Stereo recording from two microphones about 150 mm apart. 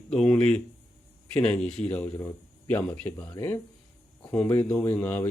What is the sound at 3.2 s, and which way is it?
Speech, 25° left (ahead or behind).